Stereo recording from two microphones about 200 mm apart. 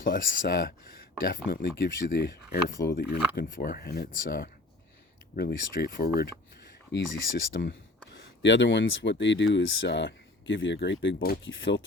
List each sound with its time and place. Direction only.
0.0 s speech: 45° left (ahead or behind); by 11.8 s 60° left (ahead or behind)